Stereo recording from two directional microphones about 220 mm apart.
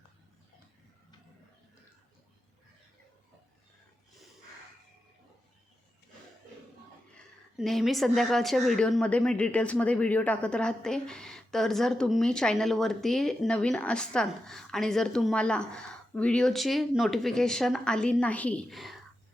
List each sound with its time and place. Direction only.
7.5 s a woman's voice: centre (ahead or behind)